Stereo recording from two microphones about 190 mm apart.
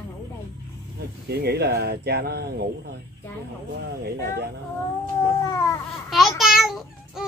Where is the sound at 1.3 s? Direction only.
55° right (ahead or behind).